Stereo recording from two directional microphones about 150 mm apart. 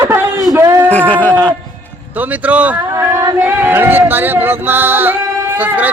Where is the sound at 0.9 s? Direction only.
10° left (ahead or behind).